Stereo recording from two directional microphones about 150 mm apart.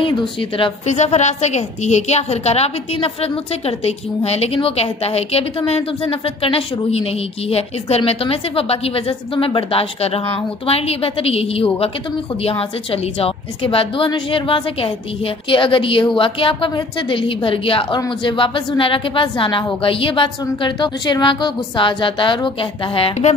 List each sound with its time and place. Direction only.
0.4 s a woman's voice: 35° left (ahead or behind)
0.8 s a woman's voice: 50° left (ahead or behind)